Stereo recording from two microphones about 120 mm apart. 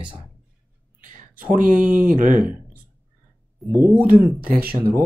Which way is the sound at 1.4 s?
15° right (ahead or behind).